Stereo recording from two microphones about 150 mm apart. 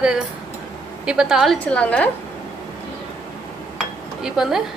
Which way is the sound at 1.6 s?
10° left (ahead or behind).